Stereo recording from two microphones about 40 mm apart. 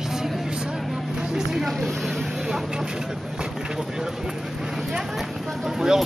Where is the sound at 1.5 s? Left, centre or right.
Centre.